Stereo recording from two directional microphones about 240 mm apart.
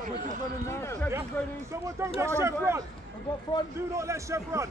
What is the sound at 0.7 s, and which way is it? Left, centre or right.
Speech, centre.